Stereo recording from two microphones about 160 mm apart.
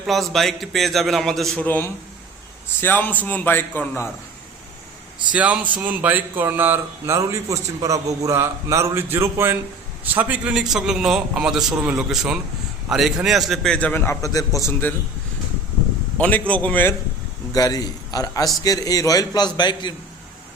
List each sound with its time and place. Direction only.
0.0 s a man's voice: centre (ahead or behind)
5.3 s a man's voice: 10° right (ahead or behind); by 14.9 s 10° left (ahead or behind)
16.1 s a man's voice: 10° left (ahead or behind)
17.5 s a man's voice: 25° left (ahead or behind)